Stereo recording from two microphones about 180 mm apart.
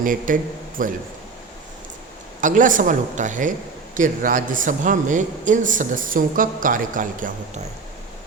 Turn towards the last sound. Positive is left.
turn(degrees=-45)  # may be behind; listen again after turning